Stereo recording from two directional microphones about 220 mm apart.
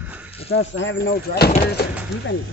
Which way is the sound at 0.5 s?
55° left (ahead or behind).